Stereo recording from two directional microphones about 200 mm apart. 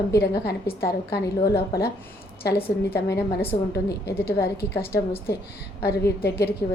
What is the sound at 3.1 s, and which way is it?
Speech, 15° left (ahead or behind).